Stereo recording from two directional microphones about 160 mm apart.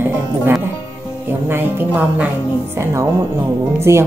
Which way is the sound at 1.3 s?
15° right (ahead or behind).